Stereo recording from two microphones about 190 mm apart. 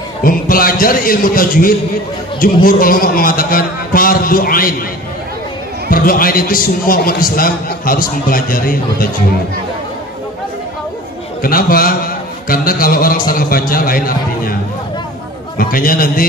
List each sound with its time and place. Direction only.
0.2 s a man's voice: 50° left (ahead or behind)
2.4 s a sound: 50° left (ahead or behind)
5.9 s a man's voice: 50° left (ahead or behind)
11.4 s a man's voice: 50° left (ahead or behind)
15.5 s a man's voice: 50° left (ahead or behind)